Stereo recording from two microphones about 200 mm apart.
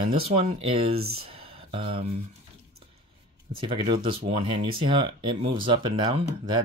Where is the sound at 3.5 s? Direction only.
25° right (ahead or behind).